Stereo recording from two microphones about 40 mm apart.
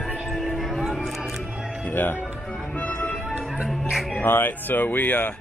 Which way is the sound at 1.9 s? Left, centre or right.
Left.